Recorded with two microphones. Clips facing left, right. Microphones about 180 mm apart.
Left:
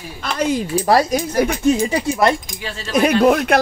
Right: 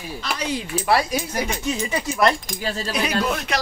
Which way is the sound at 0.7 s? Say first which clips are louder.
Left 3 dB; 40° left (ahead or behind).